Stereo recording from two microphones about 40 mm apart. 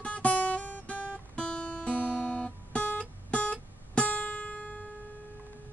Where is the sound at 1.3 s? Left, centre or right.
Left.